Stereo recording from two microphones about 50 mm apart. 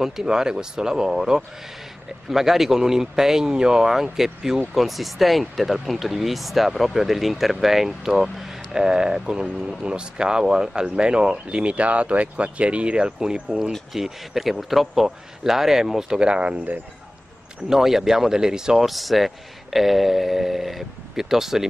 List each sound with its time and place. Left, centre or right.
0.0 s speech: centre
17.6 s speech: centre
18.9 s speech: centre